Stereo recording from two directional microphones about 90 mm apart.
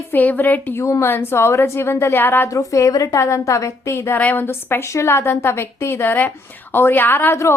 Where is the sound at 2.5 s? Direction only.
40° left (ahead or behind).